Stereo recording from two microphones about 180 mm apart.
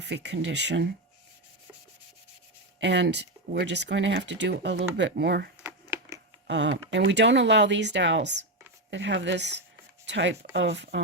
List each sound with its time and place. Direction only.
0.0 s speech: 70° right (ahead or behind)
2.8 s speech: 75° right (ahead or behind)
6.5 s speech: 80° right
10.1 s speech: 90° right